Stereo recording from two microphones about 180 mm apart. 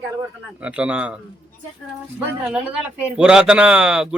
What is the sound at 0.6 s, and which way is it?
Speech, 5° right (ahead or behind).